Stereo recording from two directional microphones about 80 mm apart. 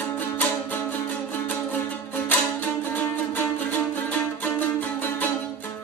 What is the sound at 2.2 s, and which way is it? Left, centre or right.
Music, left.